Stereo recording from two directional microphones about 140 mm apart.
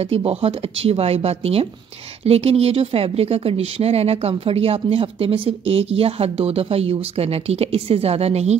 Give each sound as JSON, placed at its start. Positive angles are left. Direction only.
{"t": 0.0, "sound": "speech", "side_deg": -45}